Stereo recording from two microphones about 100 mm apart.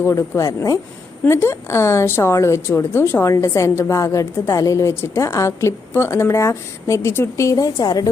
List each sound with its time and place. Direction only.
0.0 s a woman's voice: 30° left (ahead or behind)